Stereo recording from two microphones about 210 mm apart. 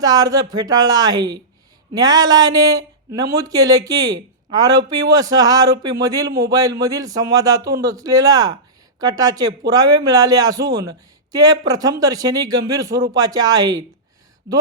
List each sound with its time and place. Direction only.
0.0 s speech: 20° right (ahead or behind)